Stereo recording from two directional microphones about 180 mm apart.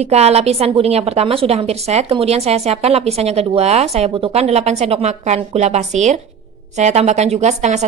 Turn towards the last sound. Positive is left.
turn(degrees=-40)  # may be behind; listen again after turning